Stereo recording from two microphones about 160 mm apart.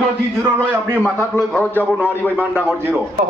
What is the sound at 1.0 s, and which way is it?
Speech, 10° left (ahead or behind).